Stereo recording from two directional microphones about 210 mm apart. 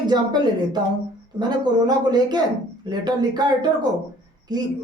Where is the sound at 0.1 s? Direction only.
20° right (ahead or behind).